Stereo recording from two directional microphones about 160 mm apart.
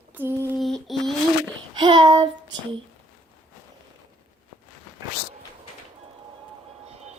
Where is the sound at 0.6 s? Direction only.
Centre (ahead or behind).